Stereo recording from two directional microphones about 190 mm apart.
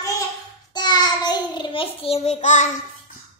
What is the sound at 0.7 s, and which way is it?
Child singing, 20° left (ahead or behind).